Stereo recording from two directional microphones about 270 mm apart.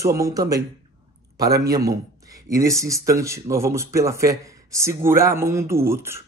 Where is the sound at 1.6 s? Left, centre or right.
Centre.